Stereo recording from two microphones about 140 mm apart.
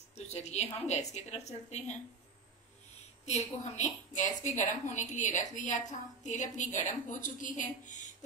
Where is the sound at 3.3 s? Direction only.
55° left (ahead or behind).